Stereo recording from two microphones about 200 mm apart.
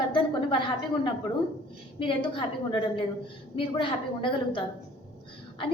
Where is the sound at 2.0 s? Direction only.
25° left (ahead or behind).